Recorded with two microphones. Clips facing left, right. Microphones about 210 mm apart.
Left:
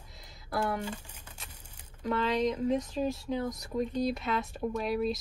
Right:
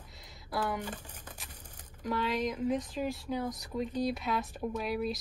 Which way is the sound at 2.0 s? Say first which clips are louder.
Left 3 dB; 10° right (ahead or behind).